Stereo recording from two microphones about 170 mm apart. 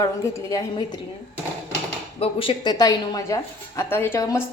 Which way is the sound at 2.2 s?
30° left (ahead or behind).